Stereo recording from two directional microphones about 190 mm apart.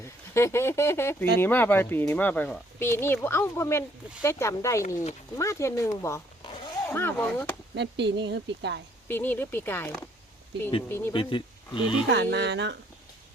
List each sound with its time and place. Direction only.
0.0 s speech: 15° left (ahead or behind)
6.0 s zipper: 15° left (ahead or behind)
6.8 s speech: 10° left (ahead or behind)
7.8 s a woman's voice: 65° right (ahead or behind)
9.0 s speech: 10° left (ahead or behind)
11.1 s speech: 25° left (ahead or behind)
12.1 s a woman's voice: 65° right (ahead or behind)